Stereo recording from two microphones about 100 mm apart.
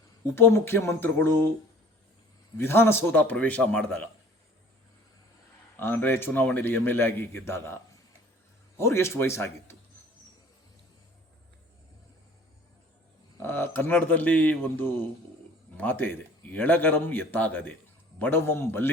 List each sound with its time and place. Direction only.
0.3 s a man's voice: 25° left (ahead or behind)
2.6 s a man's voice: 25° left (ahead or behind)
5.8 s a man's voice: 20° left (ahead or behind)
8.8 s a man's voice: 25° left (ahead or behind)
13.4 s a man's voice: 20° left (ahead or behind)